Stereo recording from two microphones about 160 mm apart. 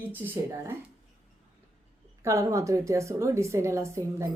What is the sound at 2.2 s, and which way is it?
A woman's voice, 20° right (ahead or behind).